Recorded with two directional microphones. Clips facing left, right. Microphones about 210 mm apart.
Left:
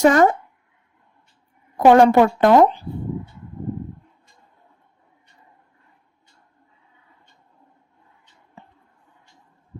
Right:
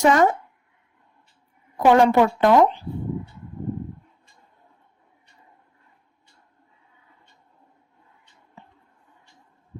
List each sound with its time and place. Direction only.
0.0 s a woman's voice: 45° left (ahead or behind)
1.7 s a woman's voice: 45° left (ahead or behind)